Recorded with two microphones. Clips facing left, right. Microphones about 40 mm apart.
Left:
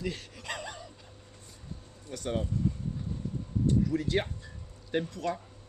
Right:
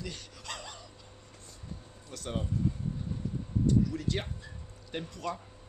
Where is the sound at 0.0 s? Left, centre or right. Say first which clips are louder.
Left 5 dB; centre.